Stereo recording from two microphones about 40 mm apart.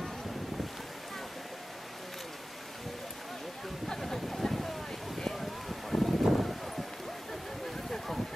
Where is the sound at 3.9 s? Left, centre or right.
Centre.